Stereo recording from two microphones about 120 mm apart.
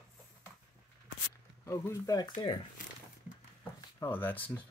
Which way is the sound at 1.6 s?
20° left (ahead or behind).